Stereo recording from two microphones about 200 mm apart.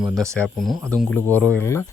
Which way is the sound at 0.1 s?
15° right (ahead or behind).